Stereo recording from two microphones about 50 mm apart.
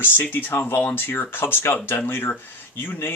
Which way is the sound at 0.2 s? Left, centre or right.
Left.